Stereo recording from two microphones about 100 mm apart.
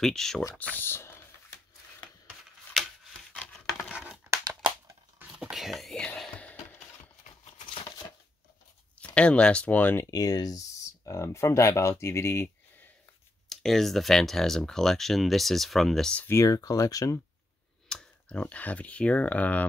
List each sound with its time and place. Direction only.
0.0 s speech: 5° left (ahead or behind)
0.6 s speech: 20° left (ahead or behind)
3.3 s a sound: 5° left (ahead or behind)
5.4 s whispering: 5° right (ahead or behind)
7.4 s a sound: 55° left (ahead or behind)
9.0 s speech: 10° left (ahead or behind)
10.1 s speech: 35° left (ahead or behind)
13.5 s speech: 5° left (ahead or behind)
16.3 s speech: 35° left (ahead or behind)
17.8 s speech: 10° left (ahead or behind)